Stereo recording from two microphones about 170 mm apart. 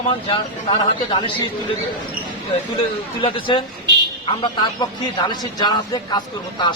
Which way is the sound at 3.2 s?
30° left (ahead or behind).